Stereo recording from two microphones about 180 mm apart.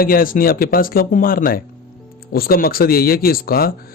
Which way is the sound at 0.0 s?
55° left (ahead or behind).